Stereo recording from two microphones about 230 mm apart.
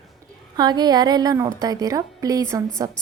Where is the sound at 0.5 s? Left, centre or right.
Centre.